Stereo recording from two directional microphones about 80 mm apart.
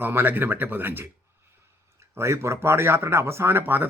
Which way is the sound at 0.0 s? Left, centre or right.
Right.